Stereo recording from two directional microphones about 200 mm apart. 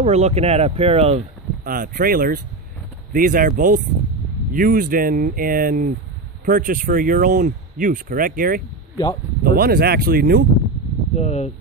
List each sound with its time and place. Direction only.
0.0 s speech: 30° right (ahead or behind)
1.6 s speech: 45° right (ahead or behind)
8.9 s speech: 20° left (ahead or behind)
9.4 s speech: 45° right (ahead or behind)
11.1 s speech: 35° left (ahead or behind)